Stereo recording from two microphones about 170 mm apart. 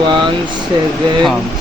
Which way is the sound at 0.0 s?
30° right (ahead or behind).